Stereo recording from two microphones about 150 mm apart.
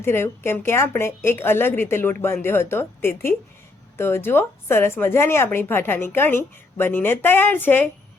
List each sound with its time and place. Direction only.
0.0 s a woman's voice: 15° left (ahead or behind)